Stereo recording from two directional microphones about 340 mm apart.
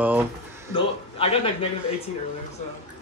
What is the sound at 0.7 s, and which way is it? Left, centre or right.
Speech, centre.